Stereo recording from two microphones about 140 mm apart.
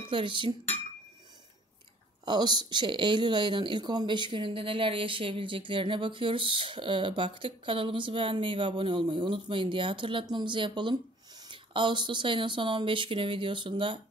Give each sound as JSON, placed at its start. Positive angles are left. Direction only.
{"t": 0.1, "sound": "speech", "side_deg": -35}
{"t": 2.2, "sound": "speech", "side_deg": -30}